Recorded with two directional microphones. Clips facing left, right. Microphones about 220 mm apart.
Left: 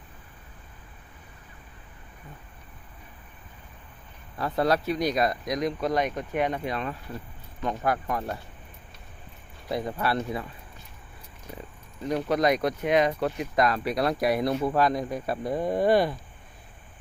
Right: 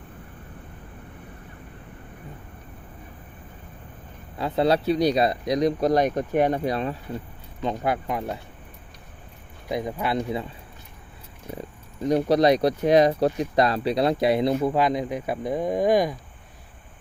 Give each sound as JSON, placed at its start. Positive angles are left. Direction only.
{"t": 4.4, "sound": "speech", "side_deg": -25}
{"t": 7.6, "sound": "speech", "side_deg": -20}
{"t": 9.6, "sound": "speech", "side_deg": -15}
{"t": 12.0, "sound": "speech", "side_deg": -35}
{"t": 14.5, "sound": "speech", "side_deg": -10}